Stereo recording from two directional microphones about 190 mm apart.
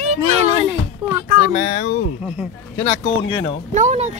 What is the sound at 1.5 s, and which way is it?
Speech, 45° left (ahead or behind).